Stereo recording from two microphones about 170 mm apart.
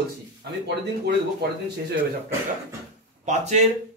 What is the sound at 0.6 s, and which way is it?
Speech, 70° right (ahead or behind).